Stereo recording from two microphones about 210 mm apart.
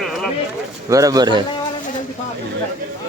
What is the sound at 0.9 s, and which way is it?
Speech, 15° right (ahead or behind).